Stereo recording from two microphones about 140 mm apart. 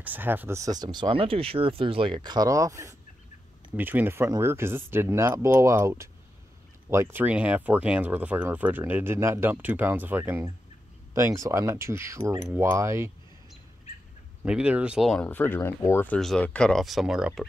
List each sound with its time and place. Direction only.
0.0 s speech: 15° right (ahead or behind)
14.4 s speech: 10° right (ahead or behind)
15.2 s speech: 15° left (ahead or behind); by 17.5 s 5° right (ahead or behind)